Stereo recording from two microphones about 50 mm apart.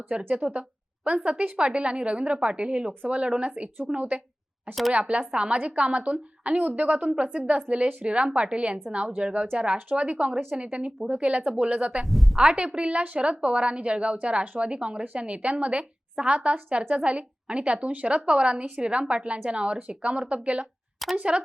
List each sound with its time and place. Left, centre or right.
0.1 s a woman's voice: right
12.0 s a woman's voice: centre
12.4 s a woman's voice: centre